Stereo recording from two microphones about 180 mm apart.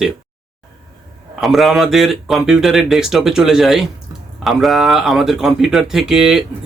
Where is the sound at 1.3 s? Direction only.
Centre (ahead or behind).